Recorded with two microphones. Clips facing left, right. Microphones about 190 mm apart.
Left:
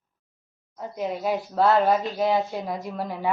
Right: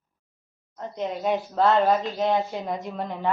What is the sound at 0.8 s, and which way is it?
A woman's voice, 5° left (ahead or behind).